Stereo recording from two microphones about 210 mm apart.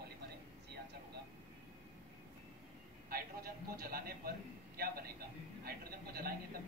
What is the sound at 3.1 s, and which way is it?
A man's voice, 45° right (ahead or behind).